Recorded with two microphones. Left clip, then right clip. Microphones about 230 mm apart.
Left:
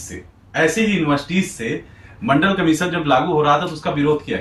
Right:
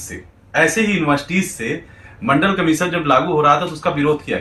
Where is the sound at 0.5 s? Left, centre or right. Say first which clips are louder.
Right 2 dB; centre.